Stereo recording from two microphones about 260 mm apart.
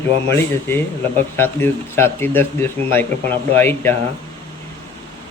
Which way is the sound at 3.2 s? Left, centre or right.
Right.